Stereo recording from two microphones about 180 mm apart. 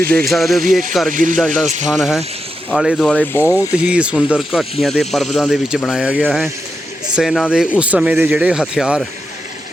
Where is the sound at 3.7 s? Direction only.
5° right (ahead or behind).